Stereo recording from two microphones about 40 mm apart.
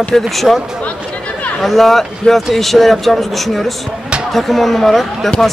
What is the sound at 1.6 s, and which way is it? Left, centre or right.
Speech, centre.